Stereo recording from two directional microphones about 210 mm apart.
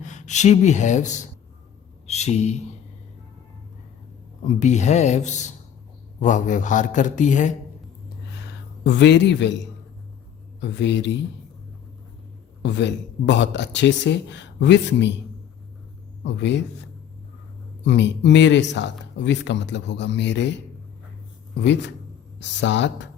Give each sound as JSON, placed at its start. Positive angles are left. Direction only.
{"t": 0.0, "sound": "speech", "side_deg": 35}
{"t": 4.4, "sound": "a man's voice", "side_deg": 35}
{"t": 8.8, "sound": "speech", "side_deg": 55}
{"t": 12.6, "sound": "speech", "side_deg": 55}
{"t": 16.2, "sound": "speech", "side_deg": 55}
{"t": 17.8, "sound": "speech", "side_deg": 55}
{"t": 21.6, "sound": "speech", "side_deg": 55}